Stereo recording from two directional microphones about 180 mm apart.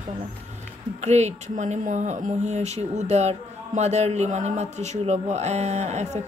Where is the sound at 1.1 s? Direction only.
40° right (ahead or behind).